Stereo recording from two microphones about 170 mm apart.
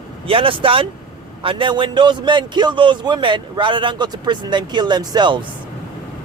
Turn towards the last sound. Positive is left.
turn(degrees=-25)  # may be behind; listen again after turning